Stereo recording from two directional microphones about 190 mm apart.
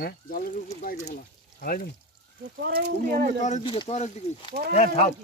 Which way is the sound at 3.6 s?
25° left (ahead or behind).